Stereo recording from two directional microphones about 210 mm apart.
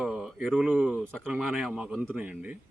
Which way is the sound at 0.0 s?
Centre (ahead or behind).